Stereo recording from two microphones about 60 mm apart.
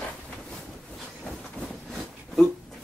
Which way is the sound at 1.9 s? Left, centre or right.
Centre.